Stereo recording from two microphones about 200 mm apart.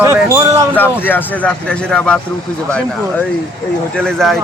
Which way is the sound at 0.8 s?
10° left (ahead or behind).